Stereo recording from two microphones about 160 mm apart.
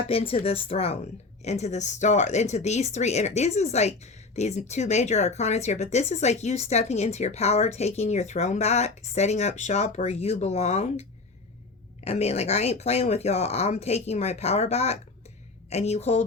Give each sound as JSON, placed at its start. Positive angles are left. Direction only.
{"t": 0.1, "sound": "speech", "side_deg": 35}